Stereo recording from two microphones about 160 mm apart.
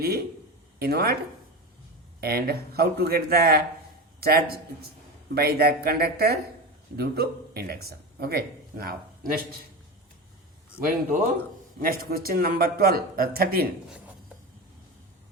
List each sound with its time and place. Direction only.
0.8 s speech: 75° right (ahead or behind)
2.2 s speech: 80° right
10.8 s speech: 60° right (ahead or behind)